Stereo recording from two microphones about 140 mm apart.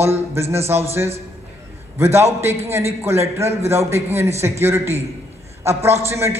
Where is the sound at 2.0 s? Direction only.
20° right (ahead or behind).